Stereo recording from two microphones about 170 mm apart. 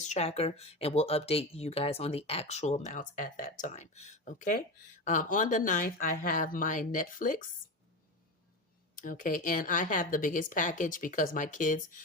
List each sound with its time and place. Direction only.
0.0 s speech: 40° left (ahead or behind)
9.0 s speech: 50° left (ahead or behind)